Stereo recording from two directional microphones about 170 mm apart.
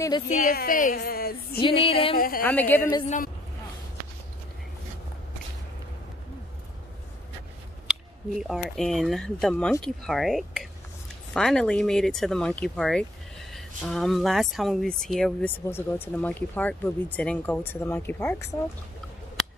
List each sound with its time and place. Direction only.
0.3 s a woman's voice: 55° left (ahead or behind)
1.6 s music: 35° left (ahead or behind)
2.1 s a woman's voice: 55° left (ahead or behind)
2.4 s speech: 10° left (ahead or behind)
7.9 s speech: centre (ahead or behind); by 18.6 s 15° left (ahead or behind)